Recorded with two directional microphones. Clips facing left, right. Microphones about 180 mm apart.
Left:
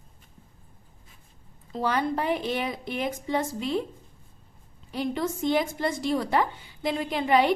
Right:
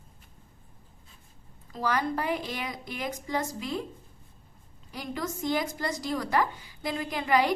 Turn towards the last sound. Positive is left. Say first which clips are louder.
# left 3 dB
turn(degrees=25)  # may be behind; listen again after turning